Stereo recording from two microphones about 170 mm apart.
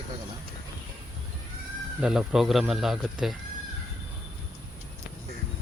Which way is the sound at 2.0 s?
5° right (ahead or behind).